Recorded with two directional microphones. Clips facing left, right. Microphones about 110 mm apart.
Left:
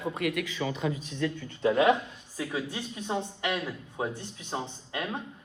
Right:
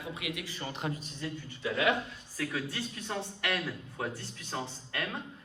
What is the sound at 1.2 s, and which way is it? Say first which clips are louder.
Speech: left 12 dB; 65° left (ahead or behind).